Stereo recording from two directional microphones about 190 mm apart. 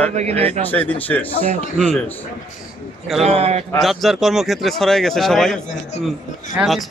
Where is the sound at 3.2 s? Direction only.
30° right (ahead or behind).